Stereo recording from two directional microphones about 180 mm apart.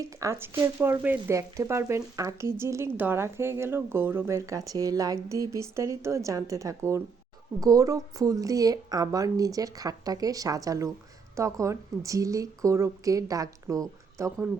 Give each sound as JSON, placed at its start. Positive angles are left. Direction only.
{"t": 0.0, "sound": "speech", "side_deg": -15}